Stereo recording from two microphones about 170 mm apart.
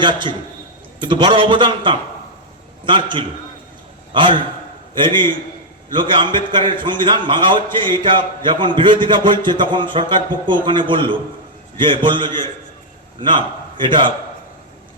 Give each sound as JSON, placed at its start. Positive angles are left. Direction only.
{"t": 0.0, "sound": "a man's voice", "side_deg": -25}